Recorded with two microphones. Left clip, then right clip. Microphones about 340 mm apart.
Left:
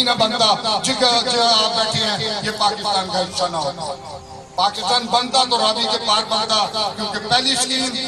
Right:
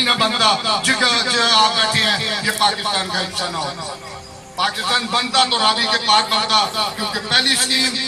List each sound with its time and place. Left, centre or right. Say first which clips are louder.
0.0 s speech: right 1 dB; left
4.6 s speech: left 1 dB; left